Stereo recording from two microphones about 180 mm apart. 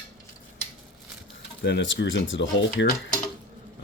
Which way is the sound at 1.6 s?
90° left.